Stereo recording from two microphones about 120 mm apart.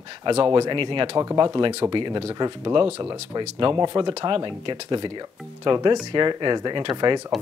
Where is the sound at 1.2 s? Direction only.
30° right (ahead or behind).